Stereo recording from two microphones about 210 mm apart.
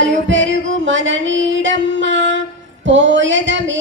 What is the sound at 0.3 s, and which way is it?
Music, 60° right (ahead or behind).